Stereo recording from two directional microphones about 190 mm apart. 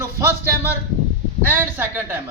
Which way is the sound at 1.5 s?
10° right (ahead or behind).